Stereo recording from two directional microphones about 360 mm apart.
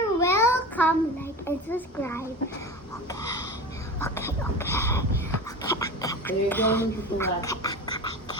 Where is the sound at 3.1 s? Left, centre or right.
Centre.